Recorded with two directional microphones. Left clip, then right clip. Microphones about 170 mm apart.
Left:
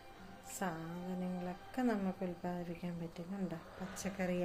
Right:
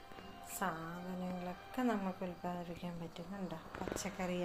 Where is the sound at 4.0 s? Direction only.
15° left (ahead or behind).